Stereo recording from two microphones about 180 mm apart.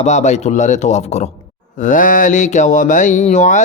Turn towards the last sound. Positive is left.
turn(degrees=40)  # may be behind; listen again after turning